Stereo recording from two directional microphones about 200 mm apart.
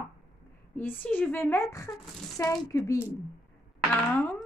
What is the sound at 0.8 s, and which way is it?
Speech, 10° left (ahead or behind).